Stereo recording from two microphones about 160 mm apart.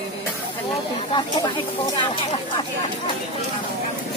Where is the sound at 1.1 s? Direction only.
30° left (ahead or behind).